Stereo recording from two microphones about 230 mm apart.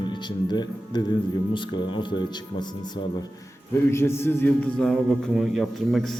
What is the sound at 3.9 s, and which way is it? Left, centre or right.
A man's voice, centre.